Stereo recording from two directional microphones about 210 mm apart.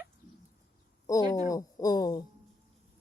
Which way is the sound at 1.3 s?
15° left (ahead or behind).